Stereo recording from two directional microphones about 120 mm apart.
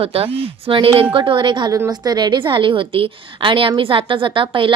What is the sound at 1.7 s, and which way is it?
A woman's voice, 30° right (ahead or behind).